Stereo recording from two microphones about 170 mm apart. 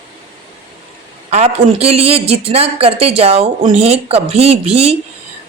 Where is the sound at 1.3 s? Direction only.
40° right (ahead or behind).